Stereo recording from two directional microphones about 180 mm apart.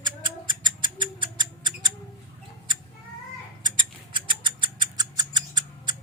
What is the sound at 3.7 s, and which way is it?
Rodents, 25° right (ahead or behind).